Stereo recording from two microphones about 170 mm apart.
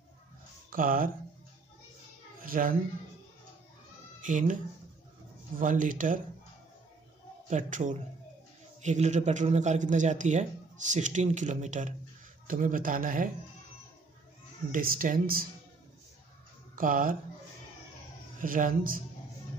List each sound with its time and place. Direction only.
0.7 s speech: 55° right (ahead or behind)
2.4 s speech: 55° right (ahead or behind)
4.2 s speech: 50° right (ahead or behind)
5.6 s a man's voice: 50° right (ahead or behind)
7.4 s a man's voice: 45° right (ahead or behind)
14.7 s speech: 55° right (ahead or behind)
16.7 s speech: 50° right (ahead or behind)
18.4 s a man's voice: 55° right (ahead or behind)